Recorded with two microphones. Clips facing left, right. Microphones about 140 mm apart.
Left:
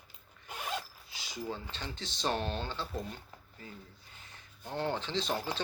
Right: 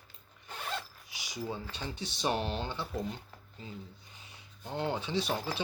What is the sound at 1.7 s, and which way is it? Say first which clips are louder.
Speech: right 2 dB; 15° right (ahead or behind).